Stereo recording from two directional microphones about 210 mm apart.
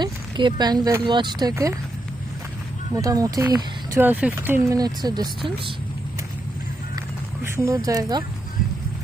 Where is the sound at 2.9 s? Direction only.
15° right (ahead or behind).